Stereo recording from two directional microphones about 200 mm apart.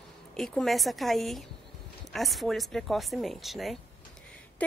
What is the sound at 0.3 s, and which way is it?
A woman's voice, 5° left (ahead or behind).